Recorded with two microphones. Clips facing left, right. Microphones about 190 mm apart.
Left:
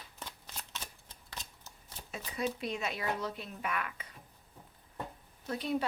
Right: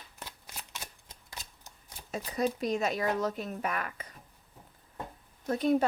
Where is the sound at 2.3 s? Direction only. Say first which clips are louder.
Right 6 dB; 40° right (ahead or behind).